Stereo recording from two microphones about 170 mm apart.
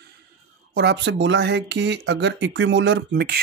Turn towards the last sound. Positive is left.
turn(degrees=-80)